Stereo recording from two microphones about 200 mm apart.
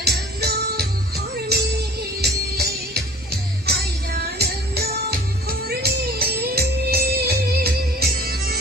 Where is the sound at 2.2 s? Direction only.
55° right (ahead or behind).